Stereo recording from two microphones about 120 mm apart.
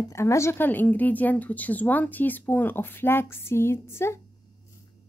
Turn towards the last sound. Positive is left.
turn(degrees=20)  # may be behind; listen again after turning